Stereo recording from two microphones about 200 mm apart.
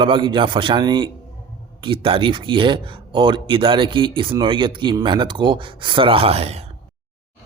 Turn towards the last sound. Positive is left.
turn(degrees=-30)  # may be behind; listen again after turning